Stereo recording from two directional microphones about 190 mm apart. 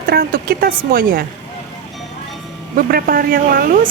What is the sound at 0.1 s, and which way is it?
A woman's voice, 50° right (ahead or behind).